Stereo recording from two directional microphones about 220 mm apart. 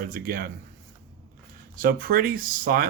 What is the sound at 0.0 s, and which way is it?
Speech, 40° right (ahead or behind).